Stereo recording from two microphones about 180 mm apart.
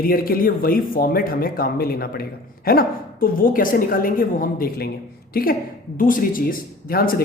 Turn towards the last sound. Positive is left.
turn(degrees=55)  # may be behind; listen again after turning